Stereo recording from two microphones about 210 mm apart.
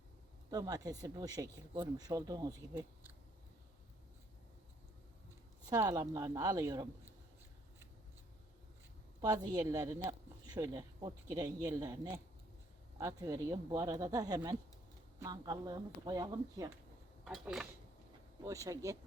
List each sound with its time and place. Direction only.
0.5 s speech: 15° right (ahead or behind)
5.6 s speech: 20° right (ahead or behind)
9.2 s speech: 20° right (ahead or behind)
17.2 s speech: centre (ahead or behind)
18.4 s speech: 15° right (ahead or behind)